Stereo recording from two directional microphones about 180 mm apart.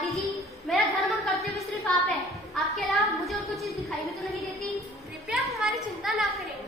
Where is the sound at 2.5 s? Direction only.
Centre (ahead or behind).